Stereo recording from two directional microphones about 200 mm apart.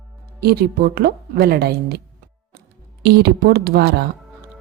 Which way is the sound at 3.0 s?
55° right (ahead or behind).